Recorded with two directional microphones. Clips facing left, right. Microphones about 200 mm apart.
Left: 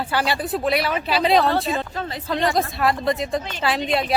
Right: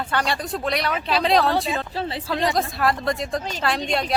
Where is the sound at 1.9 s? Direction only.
30° right (ahead or behind).